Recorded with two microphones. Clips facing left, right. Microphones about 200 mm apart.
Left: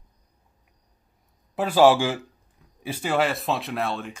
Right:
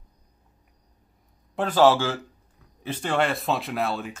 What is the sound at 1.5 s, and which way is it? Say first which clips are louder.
A man's voice: left 2 dB; 10° left (ahead or behind).